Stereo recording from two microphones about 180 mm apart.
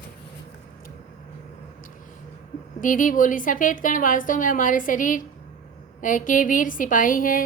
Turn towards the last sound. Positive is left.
turn(degrees=50)  # may be behind; listen again after turning